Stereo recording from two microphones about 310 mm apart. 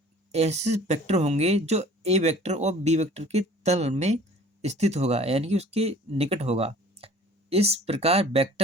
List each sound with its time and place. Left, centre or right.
0.3 s speech: right